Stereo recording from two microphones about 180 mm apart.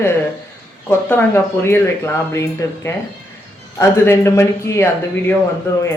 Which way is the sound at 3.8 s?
15° left (ahead or behind).